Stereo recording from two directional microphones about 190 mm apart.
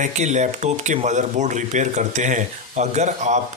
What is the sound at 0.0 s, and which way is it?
Speech, 40° right (ahead or behind).